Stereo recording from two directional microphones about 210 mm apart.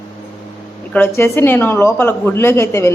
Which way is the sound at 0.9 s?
10° left (ahead or behind).